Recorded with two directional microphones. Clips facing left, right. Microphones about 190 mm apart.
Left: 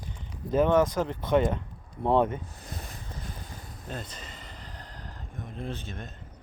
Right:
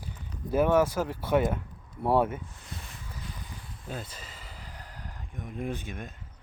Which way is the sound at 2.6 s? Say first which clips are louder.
Left 3 dB; 40° left (ahead or behind).